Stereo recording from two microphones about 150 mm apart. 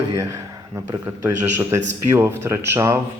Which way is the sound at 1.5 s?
15° right (ahead or behind).